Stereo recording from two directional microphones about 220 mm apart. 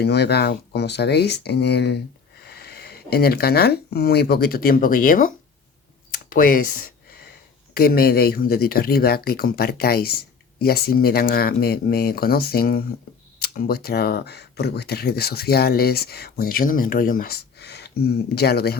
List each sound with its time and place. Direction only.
0.0 s speech: 50° left (ahead or behind)